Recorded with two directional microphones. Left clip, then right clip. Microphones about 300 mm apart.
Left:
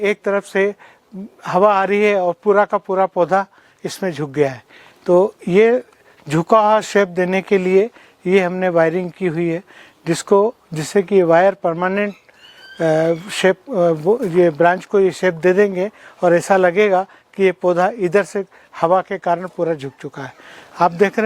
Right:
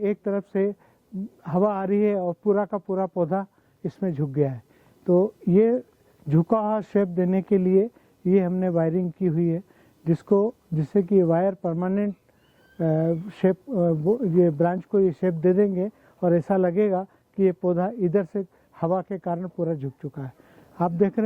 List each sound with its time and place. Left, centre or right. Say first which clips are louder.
0.0 s speech: left 8 dB; centre
5.0 s speech: left 8 dB; centre
5.5 s speech: left 7 dB; centre